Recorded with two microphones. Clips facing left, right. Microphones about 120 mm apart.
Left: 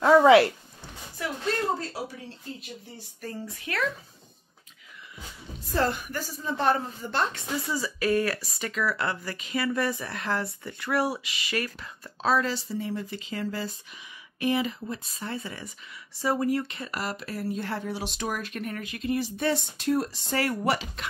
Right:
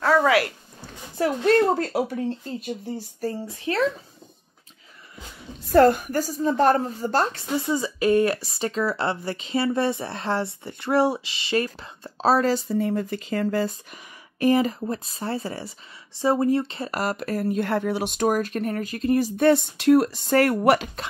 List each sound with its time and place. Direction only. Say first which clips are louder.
0.0 s a sound: left 3 dB; 20° left (ahead or behind)
1.4 s speech: right 9 dB; 65° right (ahead or behind)
3.2 s speech: right 4 dB; 30° right (ahead or behind)
5.7 s a woman's voice: right 11 dB; 50° right (ahead or behind)
7.5 s a woman's voice: right 9 dB; 25° right (ahead or behind)
16.9 s speech: right 8 dB; 45° right (ahead or behind)
19.3 s speech: right 9 dB; 60° right (ahead or behind)